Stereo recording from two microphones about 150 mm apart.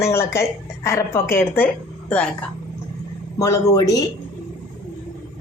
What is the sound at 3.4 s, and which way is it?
Speech, 20° left (ahead or behind).